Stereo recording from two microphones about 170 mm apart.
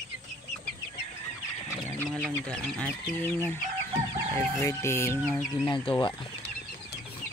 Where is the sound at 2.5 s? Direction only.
5° left (ahead or behind).